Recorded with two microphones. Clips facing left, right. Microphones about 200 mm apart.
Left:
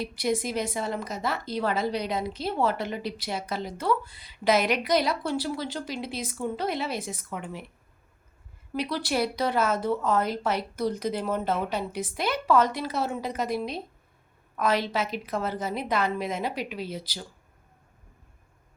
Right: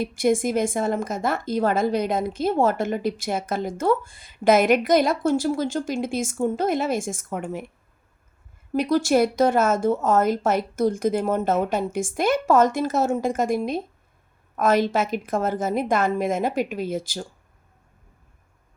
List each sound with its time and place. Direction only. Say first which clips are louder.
0.0 s a woman's voice: right 7 dB; 50° right (ahead or behind)
8.7 s a woman's voice: right 9 dB; 45° right (ahead or behind)